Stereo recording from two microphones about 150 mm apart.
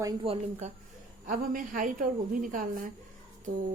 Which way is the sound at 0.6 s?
50° right (ahead or behind).